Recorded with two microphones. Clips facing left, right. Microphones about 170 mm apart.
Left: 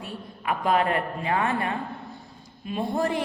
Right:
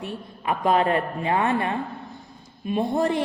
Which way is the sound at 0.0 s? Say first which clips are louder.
Right 3 dB; 25° right (ahead or behind).